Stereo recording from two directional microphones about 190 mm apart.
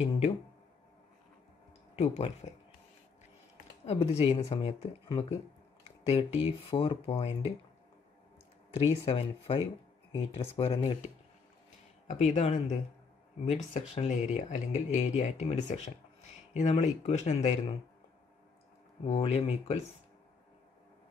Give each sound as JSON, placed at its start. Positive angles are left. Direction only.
{"t": 2.0, "sound": "speech", "side_deg": 35}
{"t": 3.8, "sound": "speech", "side_deg": 35}
{"t": 8.7, "sound": "speech", "side_deg": 35}
{"t": 12.1, "sound": "speech", "side_deg": 35}
{"t": 19.0, "sound": "speech", "side_deg": 35}